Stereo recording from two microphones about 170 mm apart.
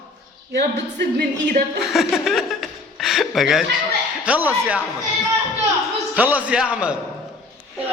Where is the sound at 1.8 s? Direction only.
Centre (ahead or behind).